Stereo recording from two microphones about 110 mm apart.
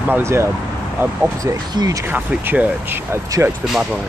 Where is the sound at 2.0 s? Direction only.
15° right (ahead or behind).